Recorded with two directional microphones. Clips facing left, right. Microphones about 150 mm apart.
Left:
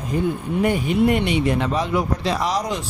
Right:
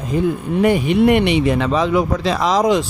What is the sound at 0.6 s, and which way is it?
Music, 90° right.